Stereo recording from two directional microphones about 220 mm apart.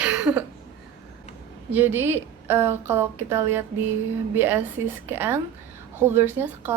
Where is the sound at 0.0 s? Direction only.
5° right (ahead or behind).